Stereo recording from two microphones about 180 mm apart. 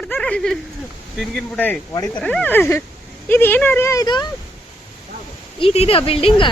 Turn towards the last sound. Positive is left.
turn(degrees=30)  # may be behind; listen again after turning